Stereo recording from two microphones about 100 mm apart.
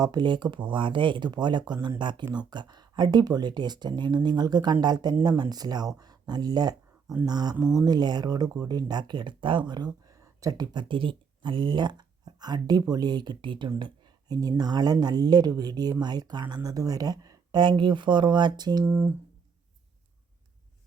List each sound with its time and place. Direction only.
0.0 s speech: 45° right (ahead or behind)
13.7 s a sound: 50° right (ahead or behind)
14.6 s speech: 40° right (ahead or behind)
18.9 s speech: 20° right (ahead or behind)